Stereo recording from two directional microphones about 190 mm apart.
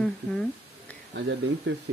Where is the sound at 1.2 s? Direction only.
75° right (ahead or behind).